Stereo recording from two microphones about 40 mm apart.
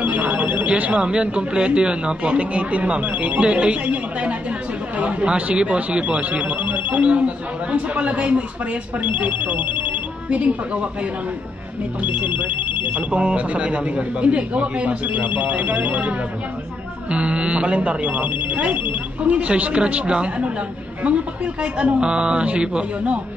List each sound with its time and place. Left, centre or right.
0.0 s telephone bell ringing: right
0.7 s speech: right
3.4 s speech: right
6.4 s speech: right
7.1 s speech: right
9.0 s speech: right
10.3 s speech: right
12.0 s speech: right
13.1 s speech: right
15.0 s speech: right
17.1 s speech: right